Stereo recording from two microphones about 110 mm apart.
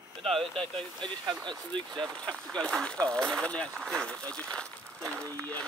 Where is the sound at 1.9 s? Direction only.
10° left (ahead or behind).